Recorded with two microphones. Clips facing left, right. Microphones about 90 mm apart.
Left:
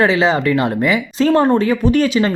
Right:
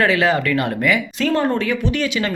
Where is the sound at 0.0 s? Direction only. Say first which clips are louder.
Left 3 dB; 25° left (ahead or behind).